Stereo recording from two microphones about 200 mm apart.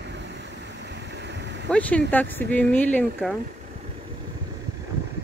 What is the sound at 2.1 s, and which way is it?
Speech, 10° left (ahead or behind).